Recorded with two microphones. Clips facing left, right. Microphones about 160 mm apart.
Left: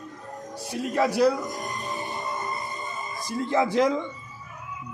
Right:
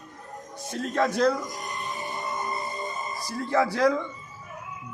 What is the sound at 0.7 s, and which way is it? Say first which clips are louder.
Speech: left 1 dB; 10° left (ahead or behind).